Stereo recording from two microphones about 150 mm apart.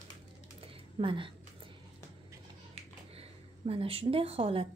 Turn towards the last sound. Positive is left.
turn(degrees=-40)  # may be behind; listen again after turning